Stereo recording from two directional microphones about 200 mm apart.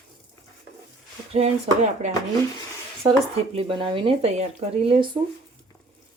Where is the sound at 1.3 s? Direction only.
35° right (ahead or behind).